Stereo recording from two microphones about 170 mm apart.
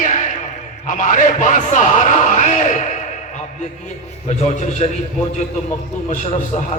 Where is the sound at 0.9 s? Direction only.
50° left (ahead or behind).